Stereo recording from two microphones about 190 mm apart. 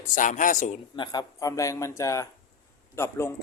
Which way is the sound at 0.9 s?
25° left (ahead or behind).